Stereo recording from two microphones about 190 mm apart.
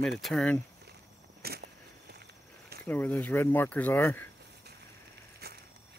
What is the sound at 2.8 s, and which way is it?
Speech, 10° left (ahead or behind).